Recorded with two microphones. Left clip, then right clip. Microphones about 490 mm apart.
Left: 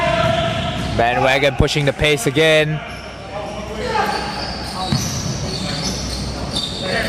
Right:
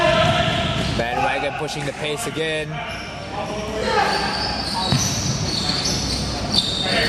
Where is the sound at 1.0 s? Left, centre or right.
Left.